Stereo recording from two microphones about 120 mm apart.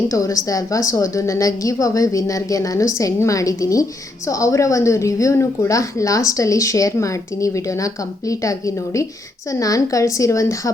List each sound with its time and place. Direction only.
0.1 s a woman's voice: 25° left (ahead or behind)